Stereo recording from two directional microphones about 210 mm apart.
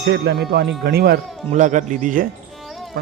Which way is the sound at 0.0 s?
50° right (ahead or behind).